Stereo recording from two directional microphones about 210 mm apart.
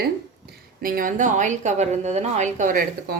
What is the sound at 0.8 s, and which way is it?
Speech, 40° right (ahead or behind).